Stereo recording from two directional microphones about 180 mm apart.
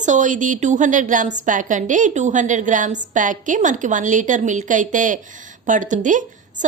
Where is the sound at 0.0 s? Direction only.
45° right (ahead or behind).